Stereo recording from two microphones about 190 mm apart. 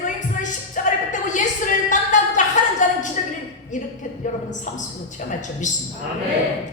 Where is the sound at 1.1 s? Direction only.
40° left (ahead or behind).